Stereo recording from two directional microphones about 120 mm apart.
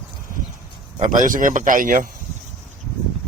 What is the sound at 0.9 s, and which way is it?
Speech, 90° right.